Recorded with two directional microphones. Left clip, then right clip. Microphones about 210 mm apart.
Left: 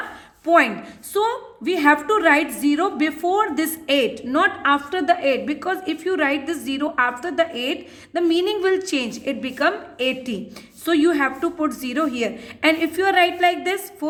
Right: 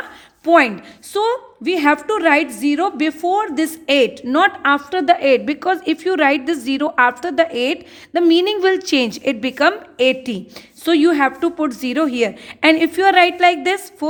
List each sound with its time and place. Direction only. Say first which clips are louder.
0.4 s a woman's voice: right 3 dB; 45° right (ahead or behind)